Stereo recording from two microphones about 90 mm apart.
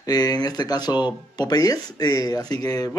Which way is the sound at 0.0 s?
45° left (ahead or behind).